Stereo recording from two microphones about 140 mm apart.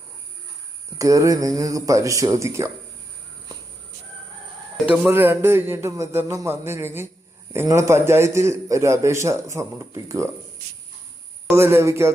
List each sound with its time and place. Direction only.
0.9 s a man's voice: 25° right (ahead or behind)
4.9 s a man's voice: 15° right (ahead or behind)
11.5 s a man's voice: 20° right (ahead or behind)